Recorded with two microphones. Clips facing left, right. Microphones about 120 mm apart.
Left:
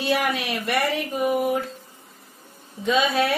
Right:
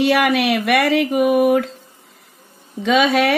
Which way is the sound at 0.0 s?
90° right.